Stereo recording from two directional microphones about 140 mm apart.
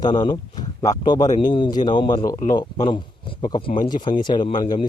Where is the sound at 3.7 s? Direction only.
90° left.